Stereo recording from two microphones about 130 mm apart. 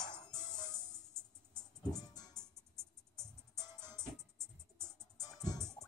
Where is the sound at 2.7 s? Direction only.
20° right (ahead or behind).